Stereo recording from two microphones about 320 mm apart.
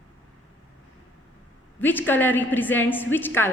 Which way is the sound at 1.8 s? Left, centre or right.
Centre.